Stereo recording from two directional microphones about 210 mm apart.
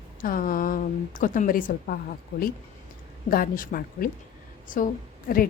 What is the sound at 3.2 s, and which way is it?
A woman's voice, 40° left (ahead or behind).